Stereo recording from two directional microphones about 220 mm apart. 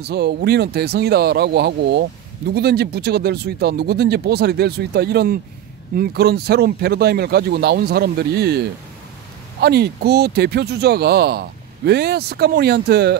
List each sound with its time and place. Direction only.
0.0 s speech: 50° right (ahead or behind)